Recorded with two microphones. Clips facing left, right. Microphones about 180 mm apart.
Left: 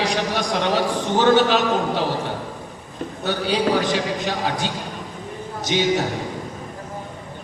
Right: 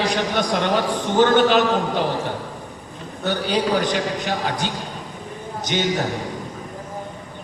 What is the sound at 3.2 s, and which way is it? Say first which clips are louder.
A man's voice: even; 60° right (ahead or behind).